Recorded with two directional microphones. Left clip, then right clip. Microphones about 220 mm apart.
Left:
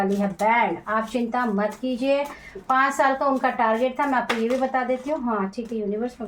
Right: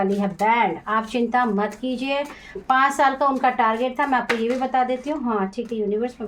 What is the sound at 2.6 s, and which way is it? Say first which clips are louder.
A woman's voice: right 2 dB; 40° right (ahead or behind).